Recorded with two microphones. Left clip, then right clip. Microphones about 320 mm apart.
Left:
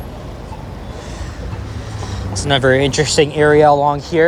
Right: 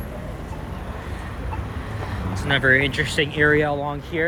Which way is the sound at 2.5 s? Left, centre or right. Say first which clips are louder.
Left 5 dB; centre.